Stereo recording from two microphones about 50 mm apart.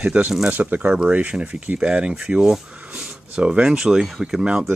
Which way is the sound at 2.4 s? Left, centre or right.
Centre.